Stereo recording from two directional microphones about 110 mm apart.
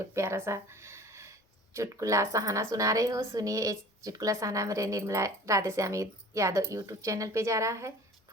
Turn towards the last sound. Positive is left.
turn(degrees=-30)  # may be behind; listen again after turning